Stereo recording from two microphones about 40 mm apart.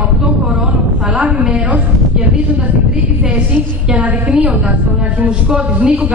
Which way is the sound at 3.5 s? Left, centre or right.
Right.